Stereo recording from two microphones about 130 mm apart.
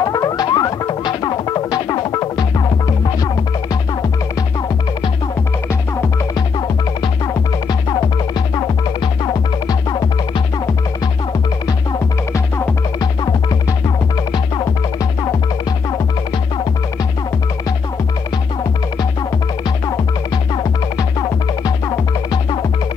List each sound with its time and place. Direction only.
0.0 s music: 30° left (ahead or behind)
8.5 s music: 35° left (ahead or behind)
11.6 s music: 25° left (ahead or behind)
21.2 s music: 30° left (ahead or behind)